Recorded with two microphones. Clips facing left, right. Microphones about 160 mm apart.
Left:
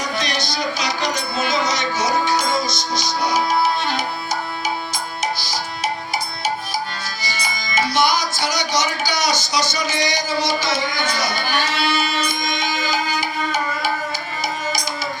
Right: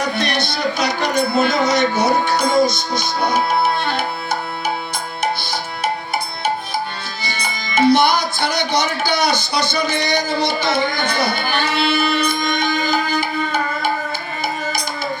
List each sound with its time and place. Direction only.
0.0 s music: 60° right (ahead or behind)
7.8 s speech: 55° right (ahead or behind)